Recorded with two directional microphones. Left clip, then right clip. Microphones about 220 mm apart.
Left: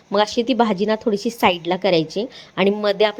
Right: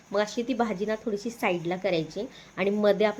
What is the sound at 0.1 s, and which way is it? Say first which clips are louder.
A woman's voice: left 9 dB; 35° left (ahead or behind).